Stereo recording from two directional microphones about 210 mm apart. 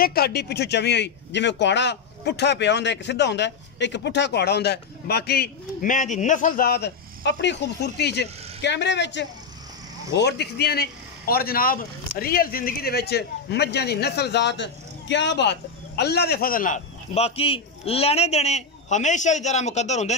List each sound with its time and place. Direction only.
0.0 s a man's voice: 45° left (ahead or behind)